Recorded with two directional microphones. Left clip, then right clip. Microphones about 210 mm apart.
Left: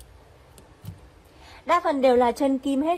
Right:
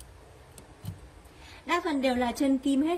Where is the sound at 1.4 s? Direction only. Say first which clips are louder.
Left 7 dB; 20° left (ahead or behind).